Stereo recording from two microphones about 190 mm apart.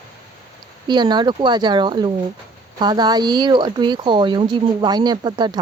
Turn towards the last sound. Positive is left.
turn(degrees=-20)  # may be behind; listen again after turning